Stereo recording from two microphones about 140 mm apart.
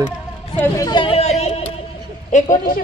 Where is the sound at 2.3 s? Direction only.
60° left (ahead or behind).